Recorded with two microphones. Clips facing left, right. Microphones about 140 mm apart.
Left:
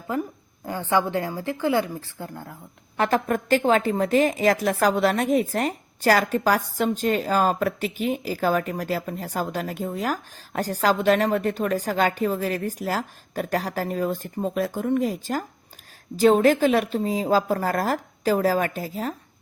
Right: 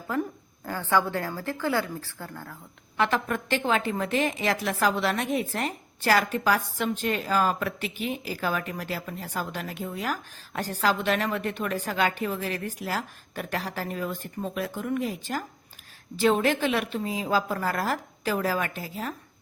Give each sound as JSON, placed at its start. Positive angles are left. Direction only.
{"t": 0.6, "sound": "a woman's voice", "side_deg": 20}
{"t": 3.0, "sound": "a woman's voice", "side_deg": 40}